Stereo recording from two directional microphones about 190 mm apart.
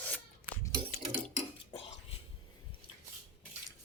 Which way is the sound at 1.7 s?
30° left (ahead or behind).